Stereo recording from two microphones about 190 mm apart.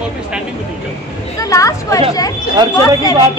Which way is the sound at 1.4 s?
15° left (ahead or behind).